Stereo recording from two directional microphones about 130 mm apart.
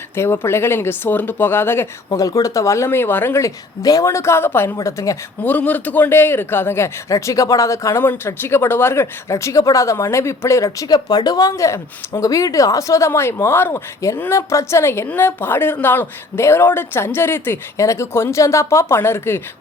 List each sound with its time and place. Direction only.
0.2 s a man's voice: 20° left (ahead or behind)
5.5 s a man's voice: 10° left (ahead or behind)